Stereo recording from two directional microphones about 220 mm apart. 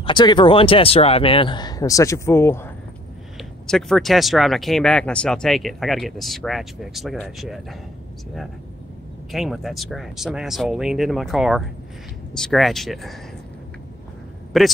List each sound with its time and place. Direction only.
0.0 s speech: 20° left (ahead or behind); by 7.6 s centre (ahead or behind)
9.3 s speech: centre (ahead or behind)
14.5 s speech: centre (ahead or behind)